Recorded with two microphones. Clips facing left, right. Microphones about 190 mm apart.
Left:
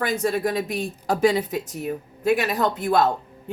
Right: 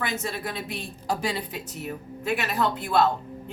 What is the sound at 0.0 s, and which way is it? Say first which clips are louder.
Speech: left 8 dB; 45° left (ahead or behind).